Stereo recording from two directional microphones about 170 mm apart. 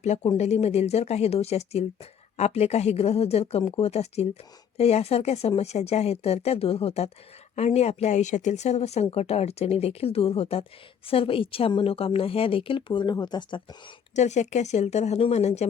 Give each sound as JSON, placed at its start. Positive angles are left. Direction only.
{"t": 0.0, "sound": "a woman's voice", "side_deg": 40}
{"t": 14.2, "sound": "a woman's voice", "side_deg": 40}